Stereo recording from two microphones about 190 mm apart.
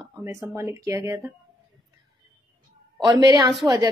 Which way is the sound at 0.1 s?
15° right (ahead or behind).